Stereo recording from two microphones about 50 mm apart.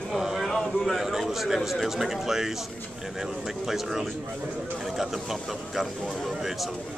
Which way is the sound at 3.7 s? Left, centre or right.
Centre.